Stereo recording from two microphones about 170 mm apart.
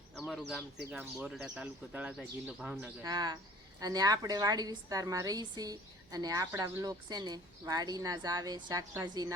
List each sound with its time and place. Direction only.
0.3 s speech: centre (ahead or behind)
3.0 s a woman's voice: 25° right (ahead or behind)